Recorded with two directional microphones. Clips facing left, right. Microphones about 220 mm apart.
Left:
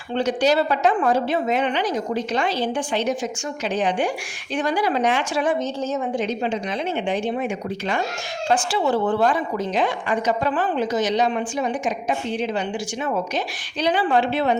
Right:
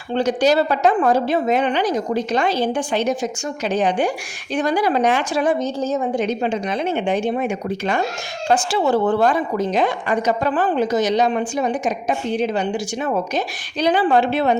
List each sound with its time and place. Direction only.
0.1 s a woman's voice: 40° right (ahead or behind)
6.2 s a woman's voice: 50° right (ahead or behind)